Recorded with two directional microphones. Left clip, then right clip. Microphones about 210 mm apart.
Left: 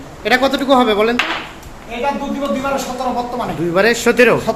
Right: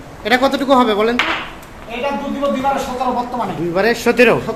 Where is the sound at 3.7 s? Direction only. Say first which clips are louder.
Left 2 dB; 10° left (ahead or behind).